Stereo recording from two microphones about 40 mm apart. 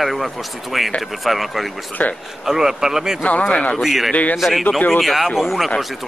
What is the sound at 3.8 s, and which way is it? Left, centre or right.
Speech, centre.